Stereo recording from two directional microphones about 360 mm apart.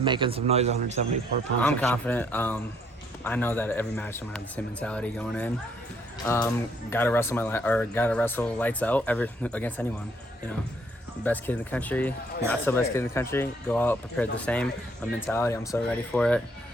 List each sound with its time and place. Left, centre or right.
0.0 s a man's voice: centre
1.6 s speech: centre
11.2 s speech: centre